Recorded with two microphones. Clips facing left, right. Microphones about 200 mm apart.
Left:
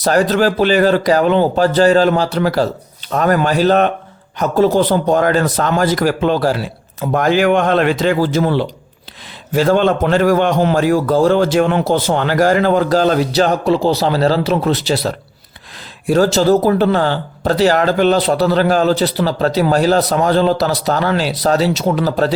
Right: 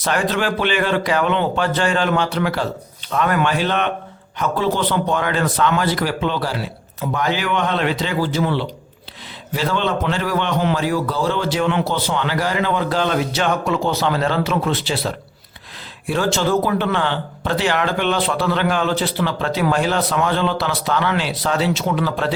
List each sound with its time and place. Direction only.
0.0 s a man's voice: 40° left (ahead or behind)